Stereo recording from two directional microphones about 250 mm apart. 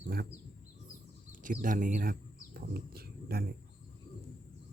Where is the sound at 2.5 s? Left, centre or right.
Right.